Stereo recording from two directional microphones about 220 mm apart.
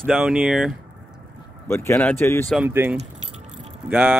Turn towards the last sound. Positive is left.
turn(degrees=-10)  # may be behind; listen again after turning